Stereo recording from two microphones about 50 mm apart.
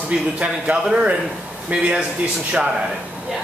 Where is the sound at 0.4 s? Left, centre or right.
Right.